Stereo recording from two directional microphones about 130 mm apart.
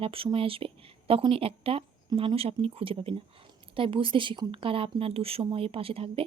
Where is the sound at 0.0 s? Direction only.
45° right (ahead or behind).